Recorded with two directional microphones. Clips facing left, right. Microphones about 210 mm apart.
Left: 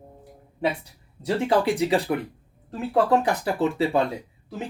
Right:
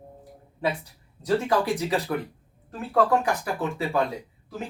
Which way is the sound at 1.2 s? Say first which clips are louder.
Left 2 dB; 20° left (ahead or behind).